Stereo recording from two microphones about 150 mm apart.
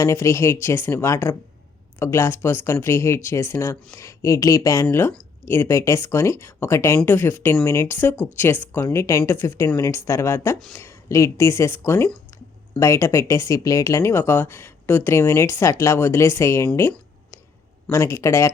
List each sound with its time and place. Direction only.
0.0 s speech: 20° left (ahead or behind)
17.9 s speech: 20° left (ahead or behind)